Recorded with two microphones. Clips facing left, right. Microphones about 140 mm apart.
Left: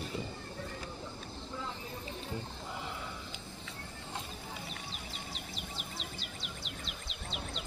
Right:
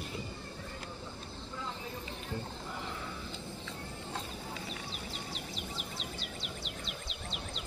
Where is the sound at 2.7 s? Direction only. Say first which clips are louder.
Left 2 dB; 15° left (ahead or behind).